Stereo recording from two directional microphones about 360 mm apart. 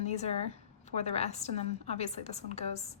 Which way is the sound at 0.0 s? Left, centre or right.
Centre.